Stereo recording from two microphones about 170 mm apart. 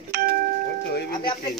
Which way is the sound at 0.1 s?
60° right (ahead or behind).